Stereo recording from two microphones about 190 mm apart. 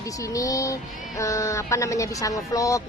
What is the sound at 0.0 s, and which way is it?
Speech, 15° left (ahead or behind).